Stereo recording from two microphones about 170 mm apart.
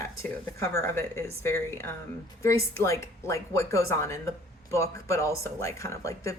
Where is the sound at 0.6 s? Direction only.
15° left (ahead or behind).